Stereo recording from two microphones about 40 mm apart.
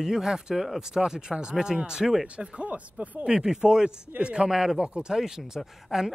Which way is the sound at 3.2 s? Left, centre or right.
Centre.